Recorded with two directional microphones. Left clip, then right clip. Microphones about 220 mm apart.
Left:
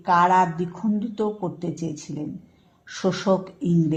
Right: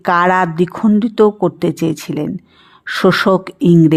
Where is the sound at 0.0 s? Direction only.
35° right (ahead or behind).